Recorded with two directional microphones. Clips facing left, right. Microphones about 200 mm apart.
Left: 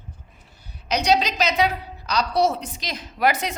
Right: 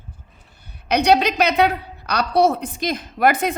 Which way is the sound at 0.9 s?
60° right (ahead or behind).